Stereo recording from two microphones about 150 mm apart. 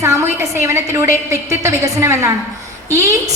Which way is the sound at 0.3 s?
20° right (ahead or behind).